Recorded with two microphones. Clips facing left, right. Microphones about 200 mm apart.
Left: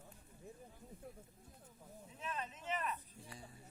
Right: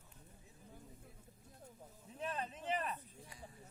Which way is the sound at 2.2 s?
35° right (ahead or behind).